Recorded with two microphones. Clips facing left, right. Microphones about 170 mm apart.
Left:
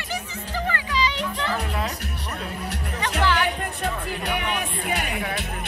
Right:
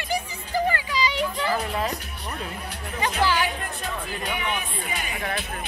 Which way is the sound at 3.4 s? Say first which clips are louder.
Left 2 dB; 65° left (ahead or behind).